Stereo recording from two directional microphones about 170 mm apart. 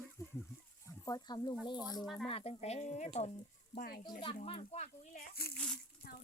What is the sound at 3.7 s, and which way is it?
Speech, 55° left (ahead or behind).